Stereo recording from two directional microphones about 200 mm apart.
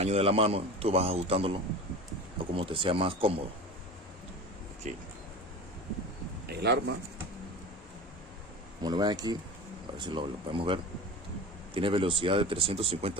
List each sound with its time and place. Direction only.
0.0 s a man's voice: 30° right (ahead or behind)
2.6 s a man's voice: 25° right (ahead or behind)
4.9 s speech: 35° right (ahead or behind)
6.5 s speech: 55° right (ahead or behind)
8.8 s a man's voice: 20° right (ahead or behind)